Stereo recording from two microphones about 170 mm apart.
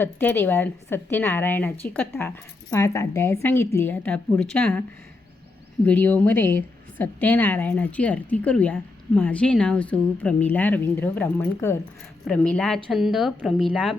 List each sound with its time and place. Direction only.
0.0 s a woman's voice: 10° left (ahead or behind)
5.8 s a woman's voice: 10° left (ahead or behind)